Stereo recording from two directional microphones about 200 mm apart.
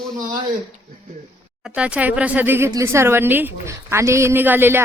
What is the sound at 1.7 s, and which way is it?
A woman's voice, 5° right (ahead or behind).